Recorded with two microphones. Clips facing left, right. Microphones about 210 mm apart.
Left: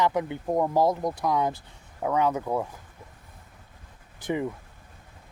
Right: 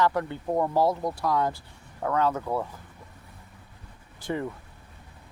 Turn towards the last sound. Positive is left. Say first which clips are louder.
# left 2 dB
turn(degrees=15)  # may be behind; listen again after turning